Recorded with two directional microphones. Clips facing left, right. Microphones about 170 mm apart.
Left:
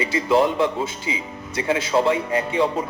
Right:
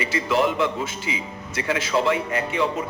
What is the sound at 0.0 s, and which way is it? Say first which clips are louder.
A man's voice: left 3 dB; 30° left (ahead or behind).